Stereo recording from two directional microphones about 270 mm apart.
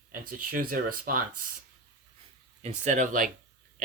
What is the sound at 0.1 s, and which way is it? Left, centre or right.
Speech, right.